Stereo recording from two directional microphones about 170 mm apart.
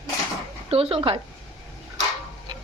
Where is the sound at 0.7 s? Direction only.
35° right (ahead or behind).